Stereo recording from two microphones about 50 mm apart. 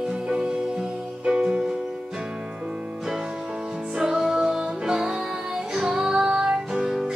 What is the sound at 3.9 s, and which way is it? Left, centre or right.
Music, centre.